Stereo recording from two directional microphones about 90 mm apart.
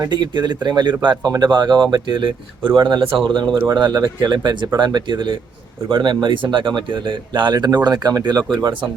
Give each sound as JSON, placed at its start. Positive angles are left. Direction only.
{"t": 0.0, "sound": "speech", "side_deg": -55}